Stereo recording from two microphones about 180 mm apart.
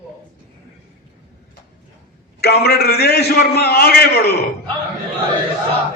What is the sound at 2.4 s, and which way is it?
A man's voice, 60° left (ahead or behind).